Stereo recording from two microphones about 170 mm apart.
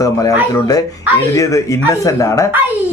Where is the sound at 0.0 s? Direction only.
20° left (ahead or behind).